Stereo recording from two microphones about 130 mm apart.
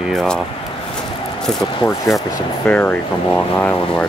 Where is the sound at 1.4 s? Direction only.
5° left (ahead or behind).